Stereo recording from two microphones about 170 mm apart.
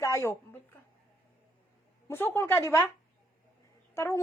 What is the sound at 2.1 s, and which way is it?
Speech, 15° left (ahead or behind).